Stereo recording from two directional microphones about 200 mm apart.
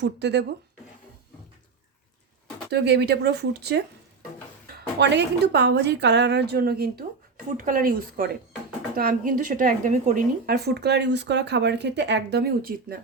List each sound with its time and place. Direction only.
0.0 s a woman's voice: 60° right (ahead or behind)
2.6 s a woman's voice: 55° right (ahead or behind)
4.9 s a woman's voice: 60° right (ahead or behind)